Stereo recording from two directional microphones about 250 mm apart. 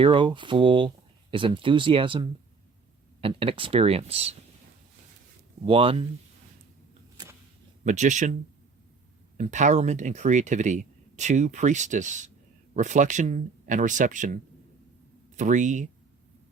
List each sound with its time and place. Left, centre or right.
0.0 s speech: centre
5.6 s speech: right
7.9 s speech: right
9.4 s speech: right
15.4 s speech: right